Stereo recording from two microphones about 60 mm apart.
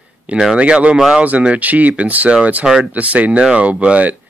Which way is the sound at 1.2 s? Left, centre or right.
Right.